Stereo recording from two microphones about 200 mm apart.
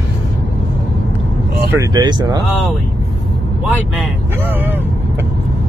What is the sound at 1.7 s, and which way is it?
Speech, 20° right (ahead or behind).